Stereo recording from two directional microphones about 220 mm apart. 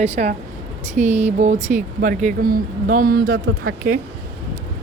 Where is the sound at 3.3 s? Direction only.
65° right (ahead or behind).